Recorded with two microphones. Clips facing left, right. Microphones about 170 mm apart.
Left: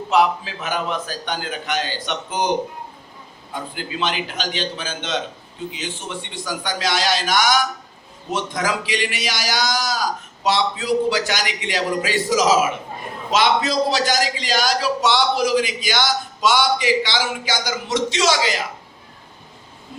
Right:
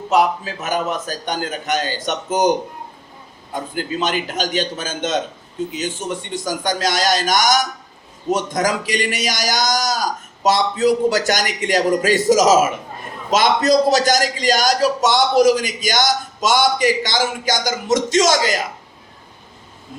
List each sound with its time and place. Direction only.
0.1 s a man's voice: 45° right (ahead or behind)